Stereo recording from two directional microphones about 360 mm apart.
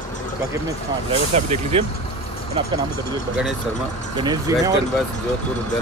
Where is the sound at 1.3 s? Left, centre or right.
Centre.